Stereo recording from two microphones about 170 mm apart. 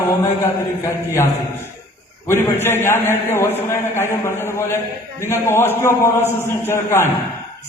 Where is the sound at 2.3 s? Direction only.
15° left (ahead or behind).